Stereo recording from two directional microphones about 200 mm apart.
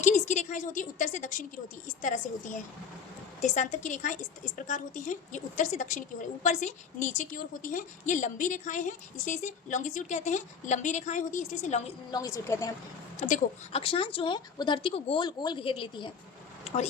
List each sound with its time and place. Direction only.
0.0 s a woman's voice: 35° left (ahead or behind)
12.1 s a woman's voice: 15° left (ahead or behind)
13.1 s speech: 35° left (ahead or behind)